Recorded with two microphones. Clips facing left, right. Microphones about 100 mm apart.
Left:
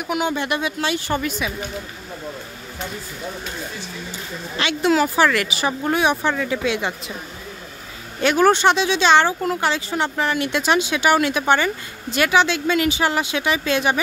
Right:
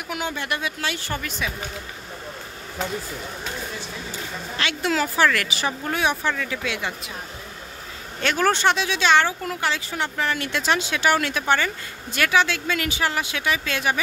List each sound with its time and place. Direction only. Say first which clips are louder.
0.1 s speech: left 6 dB; 20° left (ahead or behind)
4.6 s speech: left 6 dB; 20° left (ahead or behind)
5.9 s speech: left 5 dB; 20° left (ahead or behind)
8.2 s speech: left 5 dB; 15° left (ahead or behind)